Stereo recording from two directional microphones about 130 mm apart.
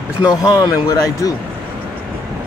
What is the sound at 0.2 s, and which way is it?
Speech, 25° left (ahead or behind).